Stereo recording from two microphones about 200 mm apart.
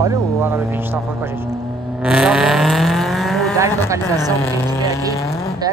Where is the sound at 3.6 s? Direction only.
15° right (ahead or behind).